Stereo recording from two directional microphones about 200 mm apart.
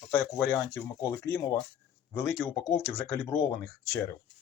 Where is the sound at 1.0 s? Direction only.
15° left (ahead or behind).